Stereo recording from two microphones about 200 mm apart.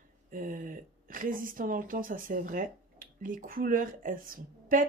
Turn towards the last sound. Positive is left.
turn(degrees=-45)  # may be behind; listen again after turning